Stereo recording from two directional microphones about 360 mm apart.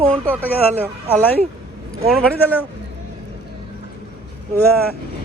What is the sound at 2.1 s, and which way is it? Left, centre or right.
Speech, centre.